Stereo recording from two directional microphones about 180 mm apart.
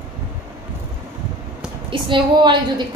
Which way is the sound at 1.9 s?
25° right (ahead or behind).